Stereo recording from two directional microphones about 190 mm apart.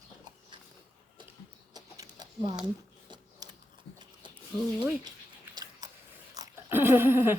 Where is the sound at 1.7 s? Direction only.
20° right (ahead or behind).